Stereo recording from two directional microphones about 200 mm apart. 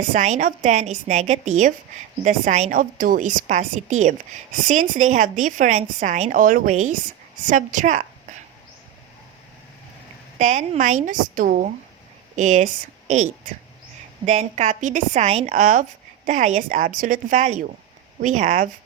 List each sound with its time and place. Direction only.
0.1 s a woman's voice: 35° right (ahead or behind)
10.3 s a woman's voice: 35° right (ahead or behind)